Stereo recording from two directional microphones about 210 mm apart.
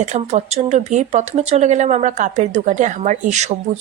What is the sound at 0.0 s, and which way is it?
A woman's voice, 35° right (ahead or behind).